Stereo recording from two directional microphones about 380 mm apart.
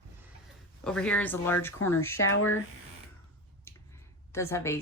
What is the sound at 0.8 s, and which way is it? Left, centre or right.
A woman's voice, centre.